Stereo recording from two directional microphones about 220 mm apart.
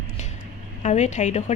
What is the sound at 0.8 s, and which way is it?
Speech, 30° left (ahead or behind).